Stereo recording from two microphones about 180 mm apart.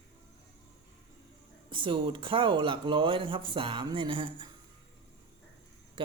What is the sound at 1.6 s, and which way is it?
Speech, 30° right (ahead or behind).